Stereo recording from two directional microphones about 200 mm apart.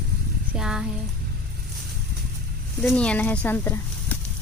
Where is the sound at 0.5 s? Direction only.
5° right (ahead or behind).